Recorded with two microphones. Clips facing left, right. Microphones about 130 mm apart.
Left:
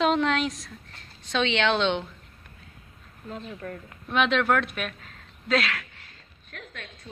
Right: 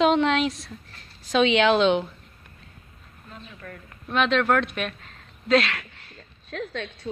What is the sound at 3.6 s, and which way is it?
Speech, 30° left (ahead or behind).